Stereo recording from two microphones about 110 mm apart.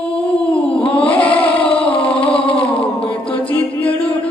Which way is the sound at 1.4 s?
60° left (ahead or behind).